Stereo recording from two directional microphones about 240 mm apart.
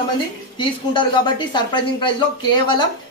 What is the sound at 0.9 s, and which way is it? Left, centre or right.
Speech, centre.